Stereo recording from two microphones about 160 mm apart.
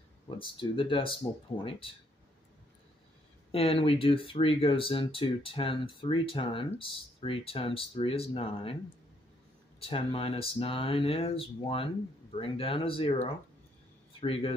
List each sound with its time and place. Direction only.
0.4 s speech: 30° left (ahead or behind)
3.5 s speech: 35° left (ahead or behind)
9.8 s speech: 35° left (ahead or behind)